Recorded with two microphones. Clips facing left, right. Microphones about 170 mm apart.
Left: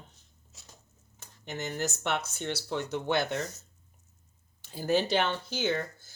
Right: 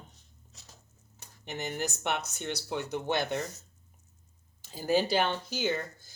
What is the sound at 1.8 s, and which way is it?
Speech, 15° right (ahead or behind).